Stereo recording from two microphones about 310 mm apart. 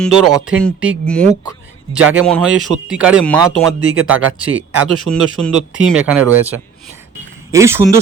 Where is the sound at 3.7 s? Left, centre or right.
Right.